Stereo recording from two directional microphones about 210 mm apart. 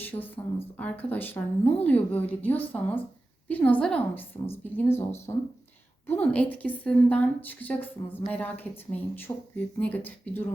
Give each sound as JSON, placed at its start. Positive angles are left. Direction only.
{"t": 0.1, "sound": "a woman's voice", "side_deg": 15}